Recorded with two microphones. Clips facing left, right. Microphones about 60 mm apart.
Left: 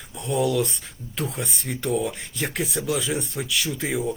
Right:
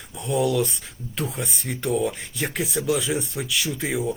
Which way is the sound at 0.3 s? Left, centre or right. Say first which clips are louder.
Right 1 dB; centre.